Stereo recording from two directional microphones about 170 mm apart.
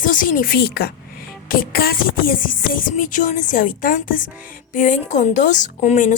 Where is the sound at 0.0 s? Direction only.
50° left (ahead or behind); by 0.9 s 70° left (ahead or behind).